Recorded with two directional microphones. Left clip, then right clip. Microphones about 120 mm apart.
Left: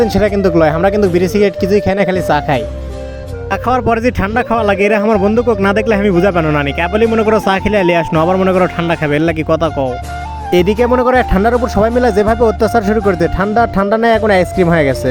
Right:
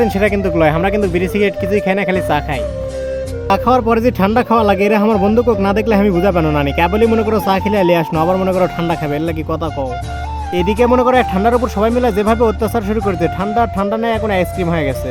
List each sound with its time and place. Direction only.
0.0 s speech: 40° left (ahead or behind)
10.5 s speech: 55° left (ahead or behind)